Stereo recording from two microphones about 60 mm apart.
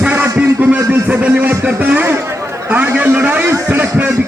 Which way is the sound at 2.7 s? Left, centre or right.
Right.